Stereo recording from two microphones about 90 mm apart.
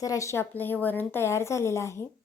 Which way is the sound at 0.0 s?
35° left (ahead or behind).